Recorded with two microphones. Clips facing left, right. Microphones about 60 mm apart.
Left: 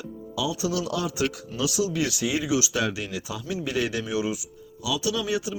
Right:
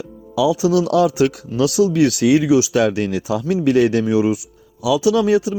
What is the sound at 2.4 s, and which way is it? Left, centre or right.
Speech, right.